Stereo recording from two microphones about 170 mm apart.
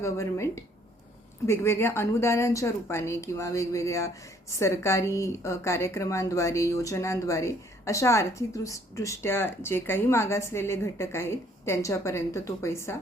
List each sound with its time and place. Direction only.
0.0 s a woman's voice: 15° left (ahead or behind)